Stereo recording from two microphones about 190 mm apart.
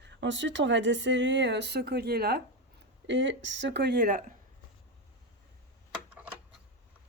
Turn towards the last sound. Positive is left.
turn(degrees=-5)  # may be behind; listen again after turning